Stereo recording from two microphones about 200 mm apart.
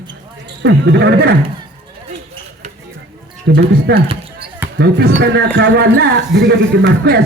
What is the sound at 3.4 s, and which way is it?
Speech, 55° right (ahead or behind).